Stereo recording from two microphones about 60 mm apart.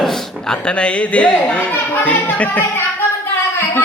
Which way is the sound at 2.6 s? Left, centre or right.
Left.